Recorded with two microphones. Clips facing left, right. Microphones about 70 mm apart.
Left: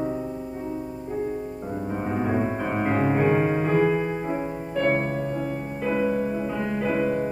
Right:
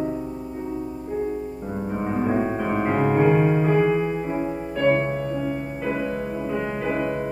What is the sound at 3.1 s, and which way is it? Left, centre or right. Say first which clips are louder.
Music: right 4 dB; right.